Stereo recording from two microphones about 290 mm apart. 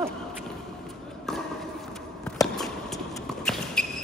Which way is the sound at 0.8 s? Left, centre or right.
Centre.